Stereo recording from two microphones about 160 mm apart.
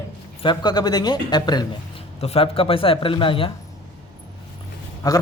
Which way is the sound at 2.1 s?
40° left (ahead or behind).